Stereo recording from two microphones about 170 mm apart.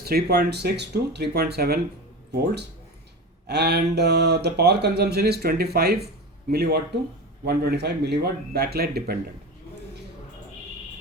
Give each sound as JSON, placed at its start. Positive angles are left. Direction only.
{"t": 0.0, "sound": "speech", "side_deg": -65}